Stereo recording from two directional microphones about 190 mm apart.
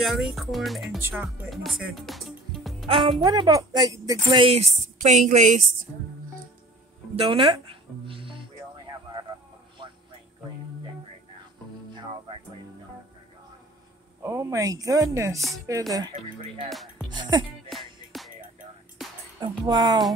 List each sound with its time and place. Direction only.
0.0 s speech: centre (ahead or behind)
2.9 s speech: 25° right (ahead or behind)
7.2 s music: 30° right (ahead or behind)
14.2 s speech: 15° right (ahead or behind)
16.6 s music: centre (ahead or behind)
17.1 s music: 25° right (ahead or behind)
17.6 s music: centre (ahead or behind)
19.4 s speech: 20° right (ahead or behind)